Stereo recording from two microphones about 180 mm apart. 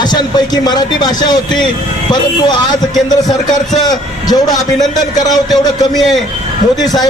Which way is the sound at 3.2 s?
20° left (ahead or behind).